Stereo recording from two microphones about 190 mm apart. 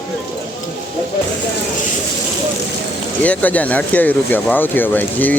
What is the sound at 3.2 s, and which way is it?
Speech, 10° left (ahead or behind).